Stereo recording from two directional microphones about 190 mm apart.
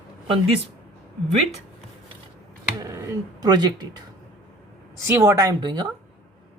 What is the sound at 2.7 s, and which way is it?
Speech, 15° right (ahead or behind).